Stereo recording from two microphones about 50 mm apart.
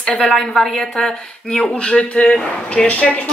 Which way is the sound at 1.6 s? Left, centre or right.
Left.